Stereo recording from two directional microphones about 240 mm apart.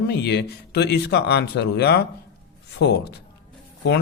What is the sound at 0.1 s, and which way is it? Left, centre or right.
Speech, left.